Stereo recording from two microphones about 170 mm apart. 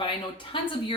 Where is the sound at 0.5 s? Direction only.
30° left (ahead or behind).